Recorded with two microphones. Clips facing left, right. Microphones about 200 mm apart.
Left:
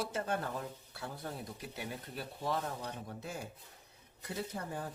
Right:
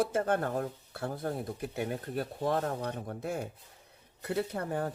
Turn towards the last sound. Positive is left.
turn(degrees=-60)  # may be behind; listen again after turning